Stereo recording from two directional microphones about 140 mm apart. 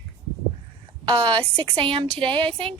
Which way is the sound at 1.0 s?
35° right (ahead or behind).